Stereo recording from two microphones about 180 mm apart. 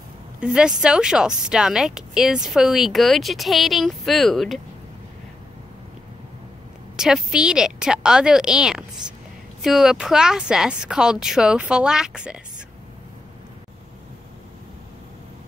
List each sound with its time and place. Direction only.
0.4 s speech: 5° right (ahead or behind)
7.0 s speech: 5° right (ahead or behind)